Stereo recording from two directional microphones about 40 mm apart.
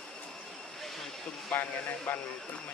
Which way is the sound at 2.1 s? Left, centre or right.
Left.